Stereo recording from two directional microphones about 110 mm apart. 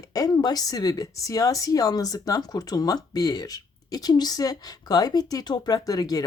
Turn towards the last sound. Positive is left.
turn(degrees=35)  # may be behind; listen again after turning